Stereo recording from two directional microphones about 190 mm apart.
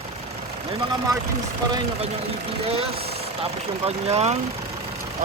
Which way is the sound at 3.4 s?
30° right (ahead or behind).